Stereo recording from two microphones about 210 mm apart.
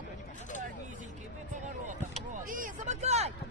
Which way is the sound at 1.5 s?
35° right (ahead or behind).